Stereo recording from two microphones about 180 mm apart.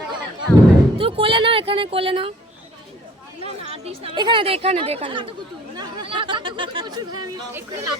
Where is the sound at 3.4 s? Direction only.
35° right (ahead or behind).